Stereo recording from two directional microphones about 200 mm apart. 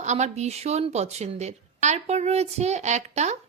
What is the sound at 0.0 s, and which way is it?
A woman's voice, 35° right (ahead or behind).